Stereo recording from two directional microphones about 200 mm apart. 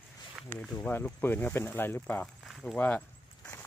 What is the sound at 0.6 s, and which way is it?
Speech, 10° left (ahead or behind).